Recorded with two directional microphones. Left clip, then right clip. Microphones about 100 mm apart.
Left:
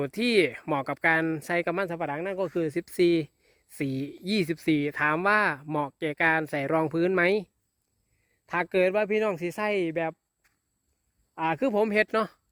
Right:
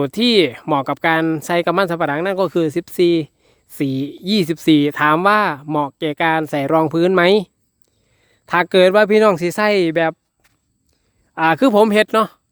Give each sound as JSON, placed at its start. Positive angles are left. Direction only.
{"t": 0.0, "sound": "speech", "side_deg": -30}
{"t": 1.7, "sound": "speech", "side_deg": -55}
{"t": 2.0, "sound": "speech", "side_deg": -90}
{"t": 2.6, "sound": "speech", "side_deg": -25}
{"t": 4.5, "sound": "speech", "side_deg": -35}
{"t": 8.4, "sound": "speech", "side_deg": -50}
{"t": 11.3, "sound": "speech", "side_deg": -55}
{"t": 11.9, "sound": "speech", "side_deg": -40}